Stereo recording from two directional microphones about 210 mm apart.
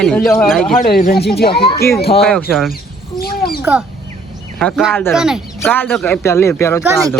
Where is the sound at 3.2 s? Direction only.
45° left (ahead or behind).